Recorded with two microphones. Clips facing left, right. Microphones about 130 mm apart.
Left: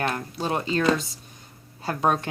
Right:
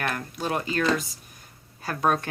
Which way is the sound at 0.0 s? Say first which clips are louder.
Left 2 dB; 25° left (ahead or behind).